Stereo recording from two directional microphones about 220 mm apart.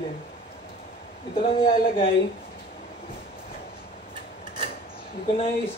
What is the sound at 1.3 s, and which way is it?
Speech, 25° left (ahead or behind).